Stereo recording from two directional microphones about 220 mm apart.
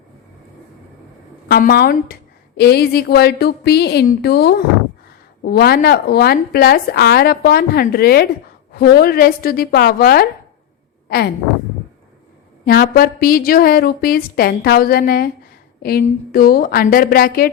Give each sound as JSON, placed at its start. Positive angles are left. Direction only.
{"t": 1.5, "sound": "a woman's voice", "side_deg": 45}
{"t": 12.6, "sound": "a woman's voice", "side_deg": 45}